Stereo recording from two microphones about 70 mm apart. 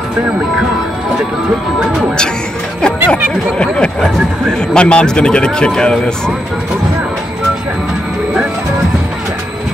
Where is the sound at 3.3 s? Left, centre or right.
Centre.